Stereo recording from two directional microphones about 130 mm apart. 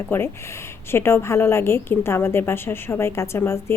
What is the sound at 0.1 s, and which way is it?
A woman's voice, 20° left (ahead or behind).